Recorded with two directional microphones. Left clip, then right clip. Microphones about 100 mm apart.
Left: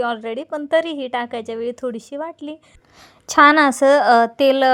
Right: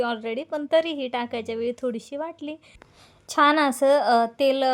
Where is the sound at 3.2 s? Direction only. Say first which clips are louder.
Left 7 dB; 85° left; by 4.7 s 60° left (ahead or behind).